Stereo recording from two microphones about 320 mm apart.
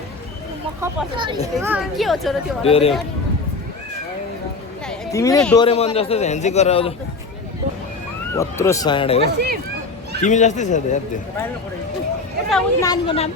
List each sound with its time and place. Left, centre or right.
0.8 s speech: centre
1.6 s speech: centre
2.6 s speech: centre
4.9 s speech: centre
5.6 s a man's voice: centre
8.4 s a man's voice: centre
12.5 s speech: centre
12.9 s speech: centre